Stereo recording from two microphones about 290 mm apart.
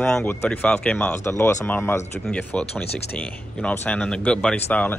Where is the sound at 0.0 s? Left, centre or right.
Centre.